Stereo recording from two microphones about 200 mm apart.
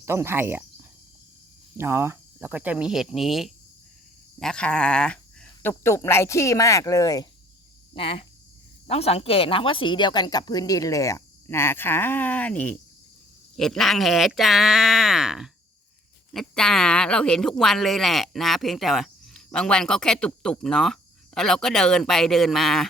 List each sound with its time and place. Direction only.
0.0 s cricket: 15° right (ahead or behind)
1.8 s a woman's voice: 10° right (ahead or behind)